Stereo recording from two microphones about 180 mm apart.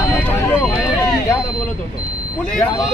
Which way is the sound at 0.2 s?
10° left (ahead or behind).